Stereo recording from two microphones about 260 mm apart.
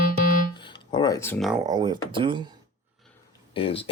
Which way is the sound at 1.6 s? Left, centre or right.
Centre.